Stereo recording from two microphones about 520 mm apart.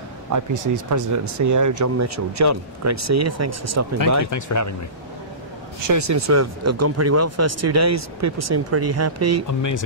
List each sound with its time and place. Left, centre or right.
0.3 s speech: right
4.3 s speech: left
5.8 s speech: right
9.5 s speech: left